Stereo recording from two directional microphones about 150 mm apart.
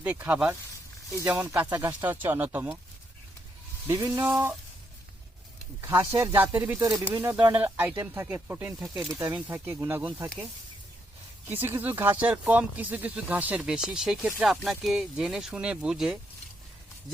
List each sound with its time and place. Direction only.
0.0 s speech: 10° right (ahead or behind)
3.8 s a sound: 20° right (ahead or behind)
5.8 s speech: 15° right (ahead or behind)
11.4 s speech: 15° right (ahead or behind)